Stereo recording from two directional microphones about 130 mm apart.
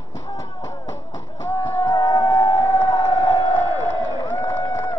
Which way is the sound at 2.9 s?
35° left (ahead or behind).